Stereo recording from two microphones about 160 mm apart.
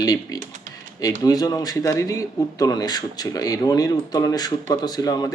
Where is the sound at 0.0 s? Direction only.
25° left (ahead or behind).